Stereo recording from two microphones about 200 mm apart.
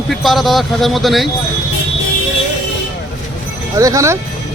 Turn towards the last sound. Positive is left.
turn(degrees=-15)  # may be behind; listen again after turning